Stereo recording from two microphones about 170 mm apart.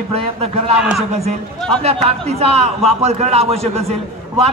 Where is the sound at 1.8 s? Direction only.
35° right (ahead or behind).